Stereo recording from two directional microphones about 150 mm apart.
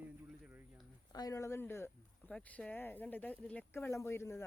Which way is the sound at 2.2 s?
5° left (ahead or behind).